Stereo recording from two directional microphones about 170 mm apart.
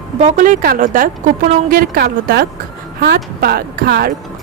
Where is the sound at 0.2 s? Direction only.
45° right (ahead or behind).